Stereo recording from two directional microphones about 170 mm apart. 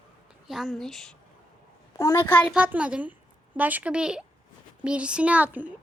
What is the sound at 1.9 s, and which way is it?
Speech, 15° left (ahead or behind).